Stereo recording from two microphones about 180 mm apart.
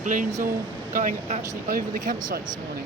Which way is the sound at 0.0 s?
45° right (ahead or behind).